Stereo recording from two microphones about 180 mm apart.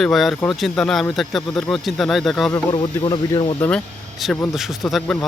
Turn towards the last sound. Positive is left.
turn(degrees=0)  # may be behind; listen again after turning